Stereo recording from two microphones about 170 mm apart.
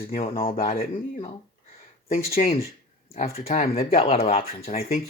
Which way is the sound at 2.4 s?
35° left (ahead or behind).